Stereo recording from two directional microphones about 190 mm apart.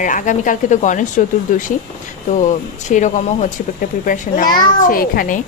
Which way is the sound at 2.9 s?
40° left (ahead or behind).